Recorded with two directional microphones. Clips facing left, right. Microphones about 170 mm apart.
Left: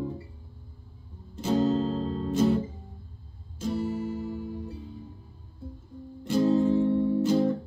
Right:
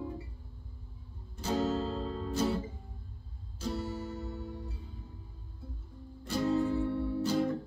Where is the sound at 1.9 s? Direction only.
30° left (ahead or behind).